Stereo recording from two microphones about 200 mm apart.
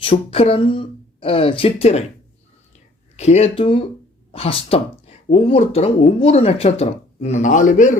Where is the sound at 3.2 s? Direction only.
30° left (ahead or behind).